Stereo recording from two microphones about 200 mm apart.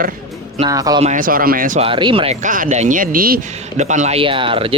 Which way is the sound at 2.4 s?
40° right (ahead or behind).